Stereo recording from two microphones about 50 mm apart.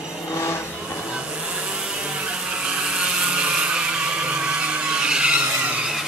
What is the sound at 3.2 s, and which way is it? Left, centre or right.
Vehicle, centre.